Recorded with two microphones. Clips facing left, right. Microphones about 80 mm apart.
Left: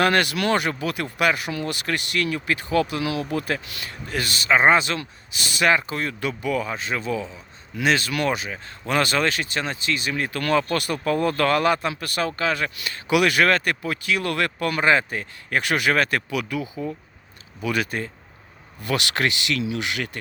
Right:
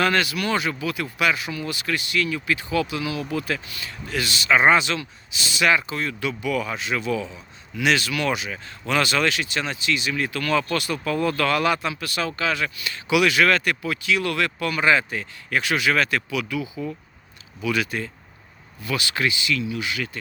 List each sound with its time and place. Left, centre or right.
0.0 s speech: left
0.7 s speech: left
3.2 s speech: left
18.8 s speech: left